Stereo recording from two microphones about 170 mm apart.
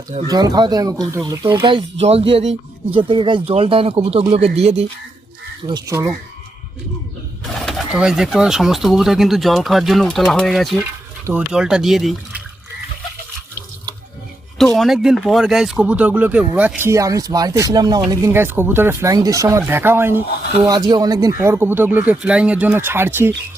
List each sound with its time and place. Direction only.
0.3 s speech: 20° right (ahead or behind); by 4.9 s 40° right (ahead or behind)
5.6 s speech: 20° right (ahead or behind)
7.6 s speech: 5° right (ahead or behind)
14.6 s speech: centre (ahead or behind)
20.7 s speech: 25° right (ahead or behind)